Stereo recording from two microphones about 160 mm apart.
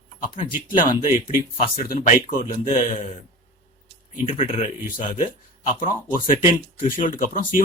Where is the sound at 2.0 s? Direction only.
45° left (ahead or behind).